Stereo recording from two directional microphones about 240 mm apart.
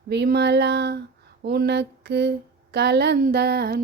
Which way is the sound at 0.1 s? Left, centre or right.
Right.